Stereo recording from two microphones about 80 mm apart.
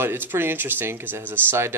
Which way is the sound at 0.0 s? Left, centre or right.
Right.